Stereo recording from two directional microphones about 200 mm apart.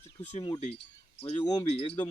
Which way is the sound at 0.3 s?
30° left (ahead or behind).